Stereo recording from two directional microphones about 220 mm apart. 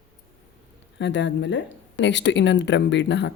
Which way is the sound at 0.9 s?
55° left (ahead or behind).